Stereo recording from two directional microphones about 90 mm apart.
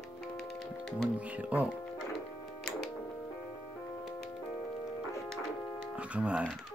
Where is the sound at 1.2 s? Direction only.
15° right (ahead or behind).